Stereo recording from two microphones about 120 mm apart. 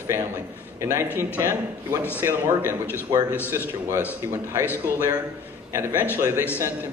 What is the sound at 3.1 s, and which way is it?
Speech, 30° right (ahead or behind).